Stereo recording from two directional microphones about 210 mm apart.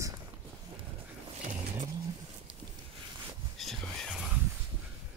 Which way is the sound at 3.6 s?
Centre (ahead or behind).